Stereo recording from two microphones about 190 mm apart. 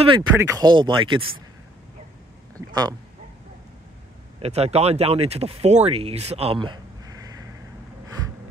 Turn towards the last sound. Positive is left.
turn(degrees=-25)  # may be behind; listen again after turning